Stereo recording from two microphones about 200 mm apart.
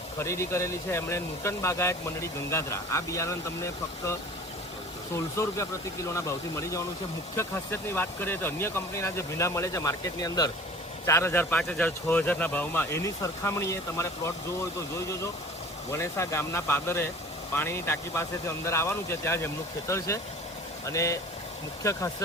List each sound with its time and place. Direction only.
0.2 s speech: 15° left (ahead or behind)
15.9 s speech: 15° left (ahead or behind)